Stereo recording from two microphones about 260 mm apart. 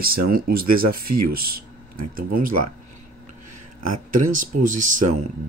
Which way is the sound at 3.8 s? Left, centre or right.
Right.